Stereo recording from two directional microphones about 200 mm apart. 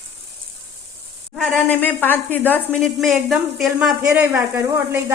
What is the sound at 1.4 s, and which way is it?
A woman's voice, 10° left (ahead or behind).